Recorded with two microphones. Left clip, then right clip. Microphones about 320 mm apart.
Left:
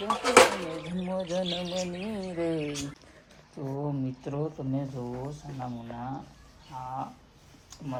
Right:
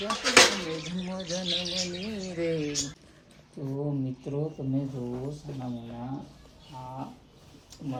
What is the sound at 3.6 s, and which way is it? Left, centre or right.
Speech, left.